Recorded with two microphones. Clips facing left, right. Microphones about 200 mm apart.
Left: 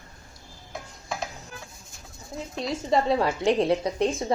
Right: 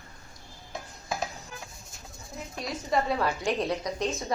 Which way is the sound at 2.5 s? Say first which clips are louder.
Left 4 dB; 25° left (ahead or behind).